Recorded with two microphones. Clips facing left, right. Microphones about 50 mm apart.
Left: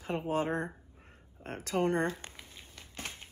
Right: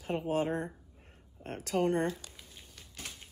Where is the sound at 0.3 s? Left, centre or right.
Left.